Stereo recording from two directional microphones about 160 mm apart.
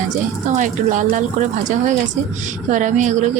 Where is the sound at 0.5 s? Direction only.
50° right (ahead or behind).